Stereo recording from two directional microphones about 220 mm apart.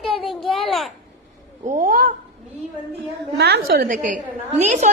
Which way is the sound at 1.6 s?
35° right (ahead or behind).